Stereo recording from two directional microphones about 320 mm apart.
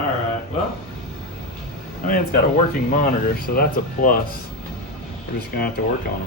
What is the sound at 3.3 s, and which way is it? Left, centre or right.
Speech, left.